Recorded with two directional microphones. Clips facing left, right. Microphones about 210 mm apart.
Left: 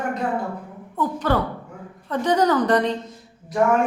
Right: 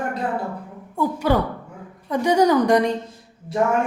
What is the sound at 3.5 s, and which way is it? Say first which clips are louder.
Speech: left 1 dB; 30° right (ahead or behind).